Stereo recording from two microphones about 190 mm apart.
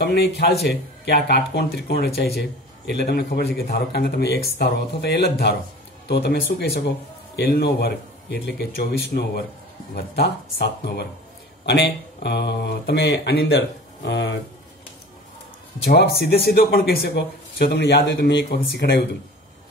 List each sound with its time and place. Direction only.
0.0 s a man's voice: 60° left (ahead or behind)
15.8 s a man's voice: 55° left (ahead or behind)